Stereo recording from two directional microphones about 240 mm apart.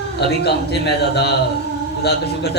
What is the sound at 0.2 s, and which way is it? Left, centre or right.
Speech, left.